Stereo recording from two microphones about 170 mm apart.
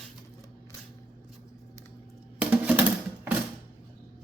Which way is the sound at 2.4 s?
10° right (ahead or behind).